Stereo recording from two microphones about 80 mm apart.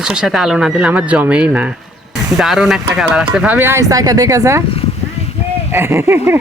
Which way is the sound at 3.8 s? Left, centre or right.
Right.